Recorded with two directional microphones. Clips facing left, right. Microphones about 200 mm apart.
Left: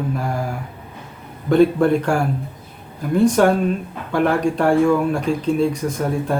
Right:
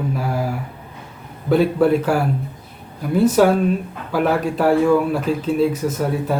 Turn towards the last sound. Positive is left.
turn(degrees=-5)  # may be behind; listen again after turning